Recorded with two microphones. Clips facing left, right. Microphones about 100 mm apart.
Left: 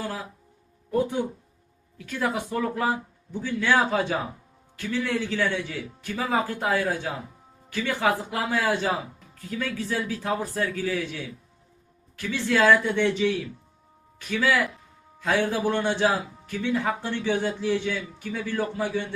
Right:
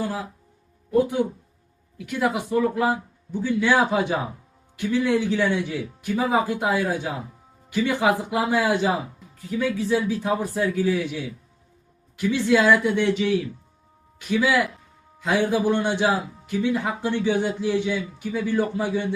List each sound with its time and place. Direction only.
0.0 s speech: 5° right (ahead or behind)
2.0 s a man's voice: 15° right (ahead or behind)